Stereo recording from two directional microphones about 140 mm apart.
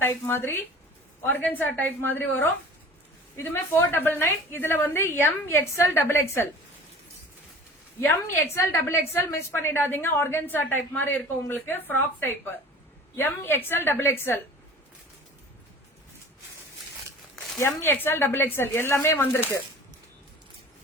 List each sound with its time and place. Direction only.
0.0 s a woman's voice: 15° left (ahead or behind)
8.5 s a woman's voice: 20° left (ahead or behind)
17.6 s a woman's voice: 20° left (ahead or behind)